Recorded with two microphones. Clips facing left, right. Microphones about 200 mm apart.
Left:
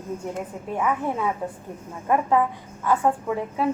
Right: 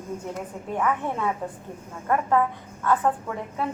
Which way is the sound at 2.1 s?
10° left (ahead or behind).